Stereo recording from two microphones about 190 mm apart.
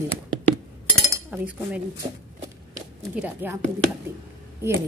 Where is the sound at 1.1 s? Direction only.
10° right (ahead or behind).